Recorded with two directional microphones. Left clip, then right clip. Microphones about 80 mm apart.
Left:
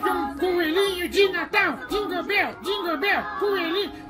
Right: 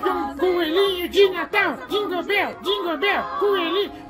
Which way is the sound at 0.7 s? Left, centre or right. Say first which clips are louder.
Right 5 dB; right.